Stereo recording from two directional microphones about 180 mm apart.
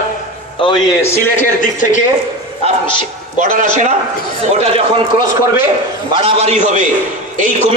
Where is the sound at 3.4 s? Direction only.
50° right (ahead or behind).